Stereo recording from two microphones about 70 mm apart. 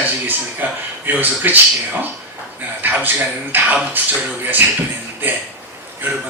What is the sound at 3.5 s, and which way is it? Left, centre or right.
A man's voice, right.